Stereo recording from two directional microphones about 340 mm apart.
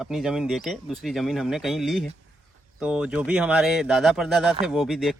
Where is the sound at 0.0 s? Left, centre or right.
Centre.